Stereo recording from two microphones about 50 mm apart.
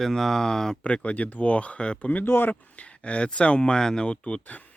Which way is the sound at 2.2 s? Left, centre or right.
Left.